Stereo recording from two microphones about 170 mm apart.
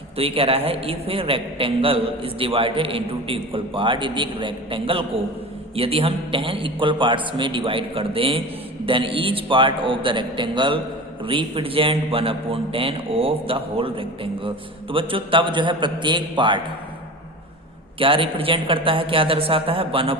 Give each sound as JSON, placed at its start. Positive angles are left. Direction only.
{"t": 0.2, "sound": "a man's voice", "side_deg": -35}
{"t": 18.0, "sound": "a man's voice", "side_deg": -30}